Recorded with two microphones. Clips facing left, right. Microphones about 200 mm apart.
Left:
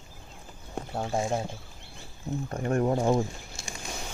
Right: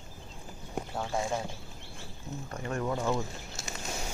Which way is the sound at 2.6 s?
50° left (ahead or behind).